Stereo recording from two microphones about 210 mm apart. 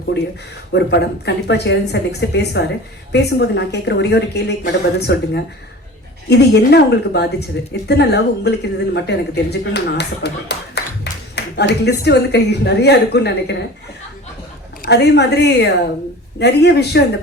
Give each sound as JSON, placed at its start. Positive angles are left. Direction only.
{"t": 0.1, "sound": "a woman's voice", "side_deg": 55}
{"t": 14.8, "sound": "a woman's voice", "side_deg": 55}